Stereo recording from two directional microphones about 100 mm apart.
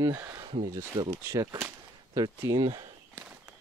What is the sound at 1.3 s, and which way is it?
Speech, 30° right (ahead or behind).